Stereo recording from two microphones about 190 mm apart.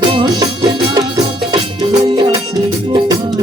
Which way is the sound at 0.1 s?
25° right (ahead or behind).